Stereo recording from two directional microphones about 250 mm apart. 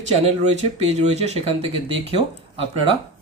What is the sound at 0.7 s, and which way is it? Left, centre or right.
Speech, right.